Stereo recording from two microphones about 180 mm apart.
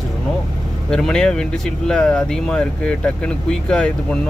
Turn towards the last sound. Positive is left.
turn(degrees=5)  # may be behind; listen again after turning